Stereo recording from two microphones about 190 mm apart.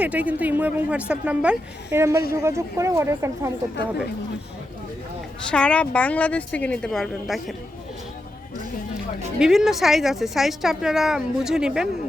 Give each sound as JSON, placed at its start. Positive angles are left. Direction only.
{"t": 0.0, "sound": "a woman's voice", "side_deg": -5}
{"t": 5.5, "sound": "speech", "side_deg": 5}
{"t": 9.4, "sound": "speech", "side_deg": -5}